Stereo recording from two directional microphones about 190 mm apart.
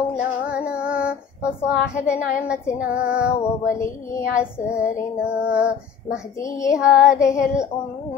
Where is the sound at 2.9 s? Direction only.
5° right (ahead or behind).